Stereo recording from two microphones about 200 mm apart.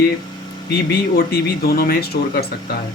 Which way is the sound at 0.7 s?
55° left (ahead or behind).